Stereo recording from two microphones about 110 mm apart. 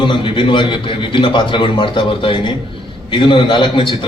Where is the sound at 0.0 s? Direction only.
50° left (ahead or behind).